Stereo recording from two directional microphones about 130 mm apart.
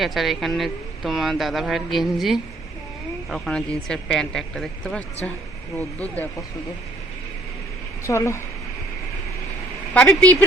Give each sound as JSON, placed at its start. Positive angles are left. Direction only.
{"t": 0.0, "sound": "speech", "side_deg": 0}
{"t": 8.0, "sound": "speech", "side_deg": 20}
{"t": 9.9, "sound": "speech", "side_deg": 10}